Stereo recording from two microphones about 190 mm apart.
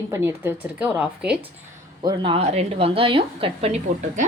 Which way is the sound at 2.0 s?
30° right (ahead or behind).